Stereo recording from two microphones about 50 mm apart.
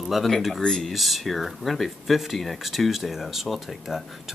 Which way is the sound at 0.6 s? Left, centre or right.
Centre.